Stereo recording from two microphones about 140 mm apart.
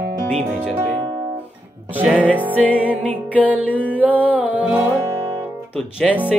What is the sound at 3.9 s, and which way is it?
Music, 10° right (ahead or behind).